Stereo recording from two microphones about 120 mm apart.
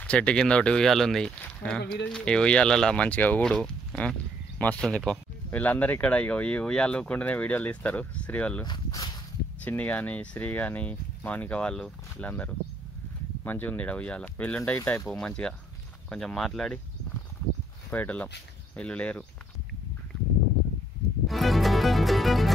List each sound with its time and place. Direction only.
0.0 s speech: 10° left (ahead or behind)
8.6 s speech: 35° left (ahead or behind)
9.7 s speech: 15° left (ahead or behind)
17.9 s speech: 10° left (ahead or behind)
21.3 s music: centre (ahead or behind)